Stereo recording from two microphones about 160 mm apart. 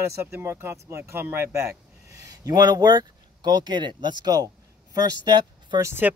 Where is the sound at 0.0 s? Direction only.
15° right (ahead or behind).